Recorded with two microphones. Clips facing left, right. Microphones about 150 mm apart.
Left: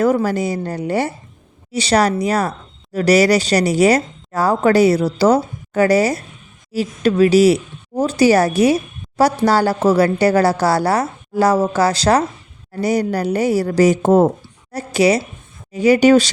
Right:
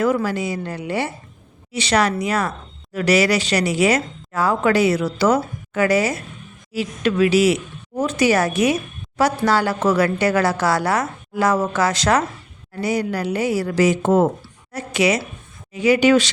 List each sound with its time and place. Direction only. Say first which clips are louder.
0.0 s a woman's voice: left 4 dB; 40° left (ahead or behind)